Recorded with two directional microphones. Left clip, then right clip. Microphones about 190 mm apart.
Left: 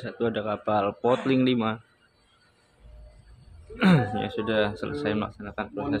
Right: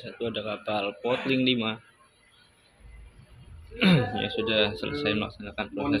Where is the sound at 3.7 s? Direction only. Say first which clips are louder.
Even; 15° left (ahead or behind).